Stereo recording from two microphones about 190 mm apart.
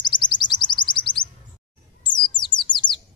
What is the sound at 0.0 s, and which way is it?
Chirp, 25° left (ahead or behind).